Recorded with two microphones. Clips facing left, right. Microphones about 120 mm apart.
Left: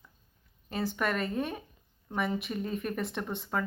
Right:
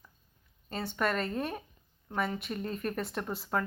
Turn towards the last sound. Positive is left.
turn(degrees=0)  # may be behind; listen again after turning